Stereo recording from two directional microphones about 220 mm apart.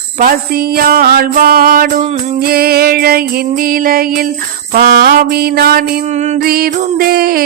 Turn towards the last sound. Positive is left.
turn(degrees=-45)  # may be behind; listen again after turning